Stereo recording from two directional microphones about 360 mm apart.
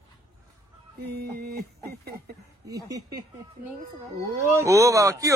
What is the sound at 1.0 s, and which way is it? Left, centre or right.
Music, right.